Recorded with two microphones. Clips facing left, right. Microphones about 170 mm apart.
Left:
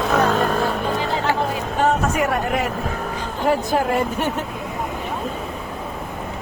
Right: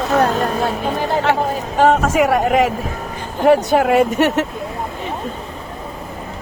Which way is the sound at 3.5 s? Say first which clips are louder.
Right 7 dB; 80° right.